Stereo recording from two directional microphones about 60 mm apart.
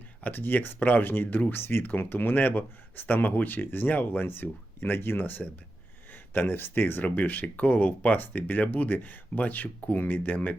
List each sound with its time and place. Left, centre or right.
0.2 s speech: left